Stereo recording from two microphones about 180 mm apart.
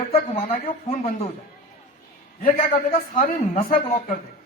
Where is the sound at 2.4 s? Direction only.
55° left (ahead or behind).